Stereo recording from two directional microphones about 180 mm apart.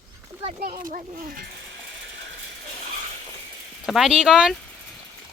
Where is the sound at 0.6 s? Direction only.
55° right (ahead or behind).